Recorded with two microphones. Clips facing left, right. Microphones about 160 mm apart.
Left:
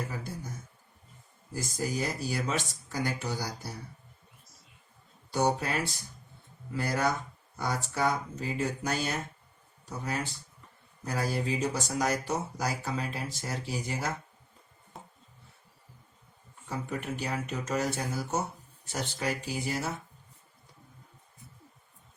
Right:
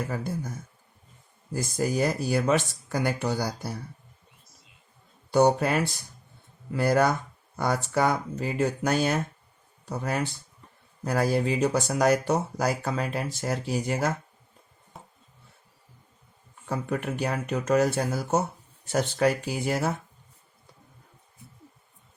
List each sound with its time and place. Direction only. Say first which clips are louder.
1.5 s speech: right 6 dB; 60° right (ahead or behind)
5.3 s speech: right 7 dB; 60° right (ahead or behind)
16.6 s speech: right 5 dB; 60° right (ahead or behind)